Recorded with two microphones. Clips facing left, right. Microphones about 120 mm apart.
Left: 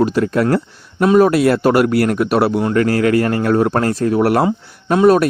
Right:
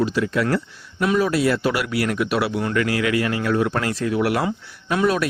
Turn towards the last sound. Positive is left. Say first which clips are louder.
# left 9 dB
turn(degrees=40)  # may be behind; listen again after turning